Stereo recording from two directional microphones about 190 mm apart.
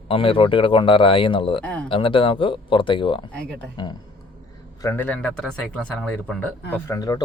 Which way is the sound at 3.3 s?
5° left (ahead or behind).